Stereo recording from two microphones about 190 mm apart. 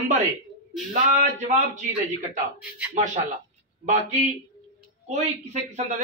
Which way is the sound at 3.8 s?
40° right (ahead or behind).